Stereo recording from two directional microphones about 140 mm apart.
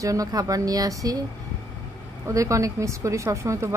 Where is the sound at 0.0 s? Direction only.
25° right (ahead or behind).